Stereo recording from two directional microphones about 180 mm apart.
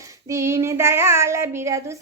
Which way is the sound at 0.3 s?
15° right (ahead or behind).